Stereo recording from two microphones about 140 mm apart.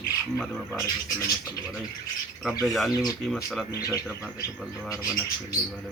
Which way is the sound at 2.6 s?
Centre (ahead or behind).